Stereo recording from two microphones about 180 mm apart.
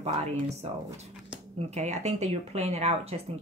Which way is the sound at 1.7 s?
40° right (ahead or behind).